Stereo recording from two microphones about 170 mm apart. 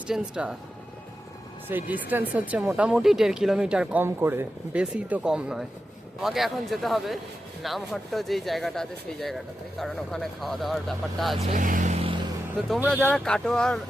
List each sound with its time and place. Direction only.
0.1 s speech: 5° right (ahead or behind)
1.6 s speech: 10° right (ahead or behind)
11.4 s vehicle: 50° right (ahead or behind)
12.9 s speech: 5° left (ahead or behind)